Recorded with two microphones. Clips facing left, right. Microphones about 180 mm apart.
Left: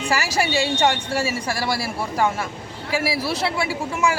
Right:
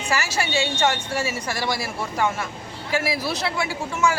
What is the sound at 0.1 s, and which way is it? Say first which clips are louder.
A woman's voice: left 2 dB; 35° left (ahead or behind).